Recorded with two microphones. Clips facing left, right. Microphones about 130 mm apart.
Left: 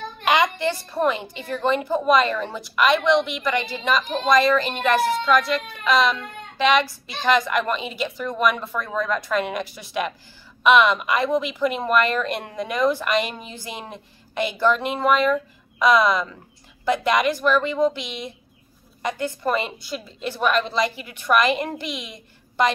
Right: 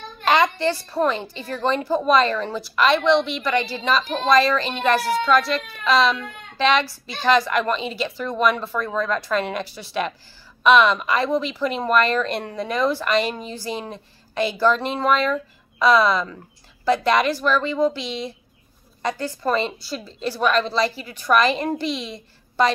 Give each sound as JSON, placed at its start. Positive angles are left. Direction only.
{"t": 0.2, "sound": "a woman's voice", "side_deg": 15}